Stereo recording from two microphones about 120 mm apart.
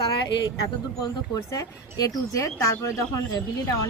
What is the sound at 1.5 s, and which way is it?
Speech, 30° left (ahead or behind).